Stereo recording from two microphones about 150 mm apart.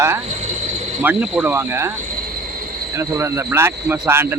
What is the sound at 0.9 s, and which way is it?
Speech, 5° right (ahead or behind).